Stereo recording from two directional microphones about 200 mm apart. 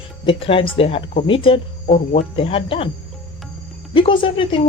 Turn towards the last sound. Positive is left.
turn(degrees=25)  # may be behind; listen again after turning